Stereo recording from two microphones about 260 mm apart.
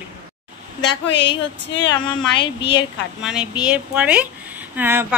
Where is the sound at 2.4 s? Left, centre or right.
Centre.